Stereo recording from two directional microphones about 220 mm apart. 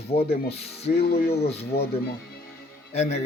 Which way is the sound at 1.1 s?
45° left (ahead or behind).